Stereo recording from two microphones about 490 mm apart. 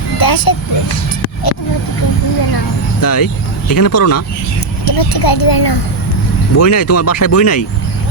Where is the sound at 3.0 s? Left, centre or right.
Left.